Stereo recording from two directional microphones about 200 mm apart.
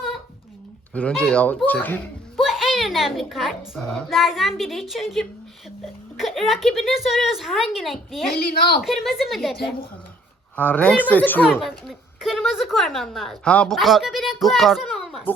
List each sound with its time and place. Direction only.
0.9 s a child's voice: 5° left (ahead or behind)
8.3 s a woman's voice: 50° left (ahead or behind)
8.8 s a child's voice: centre (ahead or behind)